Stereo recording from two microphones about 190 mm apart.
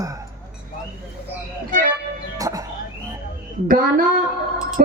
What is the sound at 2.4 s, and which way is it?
Music, 20° right (ahead or behind).